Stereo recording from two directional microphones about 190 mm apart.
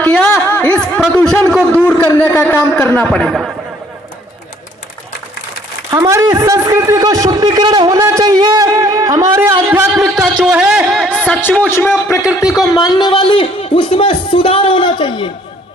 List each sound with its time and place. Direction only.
0.0 s a sound: 5° left (ahead or behind)
2.0 s a man's voice: 10° left (ahead or behind)
5.9 s a man's voice: 15° right (ahead or behind)
10.0 s a man's voice: centre (ahead or behind); by 15.3 s 25° left (ahead or behind)